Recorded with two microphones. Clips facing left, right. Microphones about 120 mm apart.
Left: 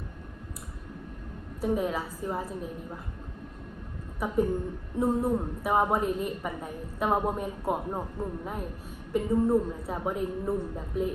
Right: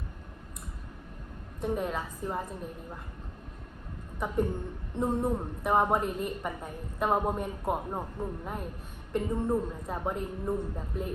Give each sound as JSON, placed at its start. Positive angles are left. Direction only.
{"t": 1.6, "sound": "a woman's voice", "side_deg": 5}
{"t": 4.2, "sound": "a woman's voice", "side_deg": 0}